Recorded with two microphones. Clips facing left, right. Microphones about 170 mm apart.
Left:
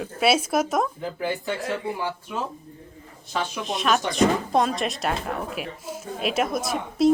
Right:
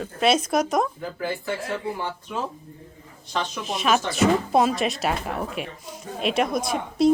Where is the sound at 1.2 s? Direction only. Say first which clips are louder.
Left 1 dB; 15° left (ahead or behind).